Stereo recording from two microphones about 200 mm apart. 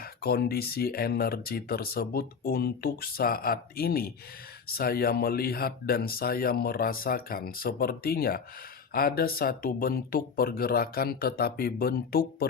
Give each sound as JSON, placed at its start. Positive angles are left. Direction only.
{"t": 0.0, "sound": "speech", "side_deg": 50}